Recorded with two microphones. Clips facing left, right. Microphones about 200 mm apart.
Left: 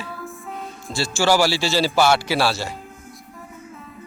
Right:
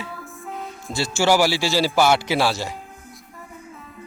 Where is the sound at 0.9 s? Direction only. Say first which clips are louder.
Even; 20° right (ahead or behind).